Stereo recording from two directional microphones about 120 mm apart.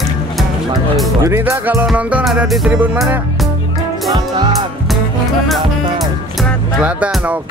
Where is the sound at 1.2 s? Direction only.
25° right (ahead or behind).